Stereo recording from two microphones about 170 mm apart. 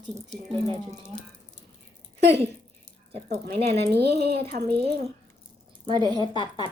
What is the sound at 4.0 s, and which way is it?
Speech, 70° right (ahead or behind).